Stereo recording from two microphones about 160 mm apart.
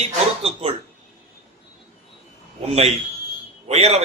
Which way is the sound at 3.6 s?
40° right (ahead or behind).